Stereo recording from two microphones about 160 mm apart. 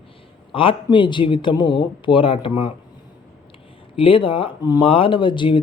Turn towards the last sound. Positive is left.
turn(degrees=30)  # may be behind; listen again after turning